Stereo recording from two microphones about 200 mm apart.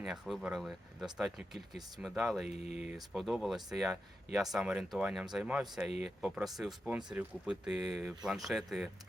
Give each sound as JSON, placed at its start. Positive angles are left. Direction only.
{"t": 0.0, "sound": "speech", "side_deg": -5}
{"t": 2.5, "sound": "speech", "side_deg": 35}
{"t": 3.1, "sound": "speech", "side_deg": 0}